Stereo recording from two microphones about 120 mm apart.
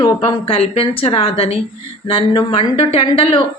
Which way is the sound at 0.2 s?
50° left (ahead or behind).